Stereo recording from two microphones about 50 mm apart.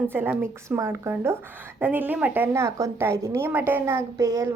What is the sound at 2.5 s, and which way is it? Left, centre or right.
Speech, right.